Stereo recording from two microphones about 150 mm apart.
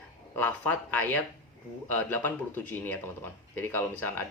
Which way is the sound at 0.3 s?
10° left (ahead or behind).